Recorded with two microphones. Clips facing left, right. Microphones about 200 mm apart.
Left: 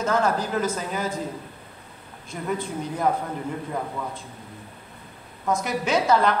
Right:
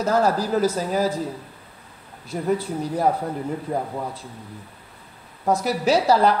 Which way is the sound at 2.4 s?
35° right (ahead or behind).